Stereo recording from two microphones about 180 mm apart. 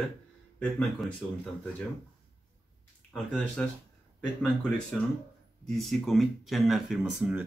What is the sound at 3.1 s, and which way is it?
Speech, 5° left (ahead or behind).